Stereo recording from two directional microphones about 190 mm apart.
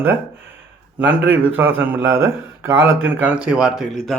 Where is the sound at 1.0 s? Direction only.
80° right.